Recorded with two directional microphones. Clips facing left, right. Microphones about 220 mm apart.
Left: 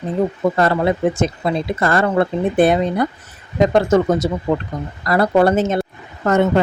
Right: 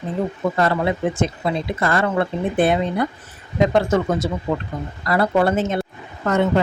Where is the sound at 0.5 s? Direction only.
40° left (ahead or behind).